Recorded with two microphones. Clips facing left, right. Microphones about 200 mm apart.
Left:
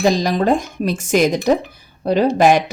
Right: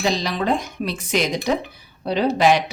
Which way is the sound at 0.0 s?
45° left (ahead or behind).